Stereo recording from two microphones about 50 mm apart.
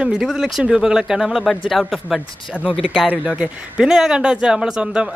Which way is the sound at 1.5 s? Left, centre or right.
Centre.